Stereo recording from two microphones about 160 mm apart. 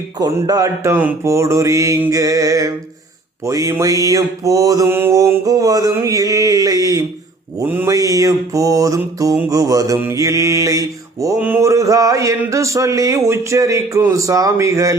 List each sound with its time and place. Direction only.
0.2 s mantra: 25° right (ahead or behind)